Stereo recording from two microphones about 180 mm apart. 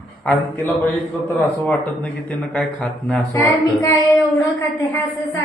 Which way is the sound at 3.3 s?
15° left (ahead or behind).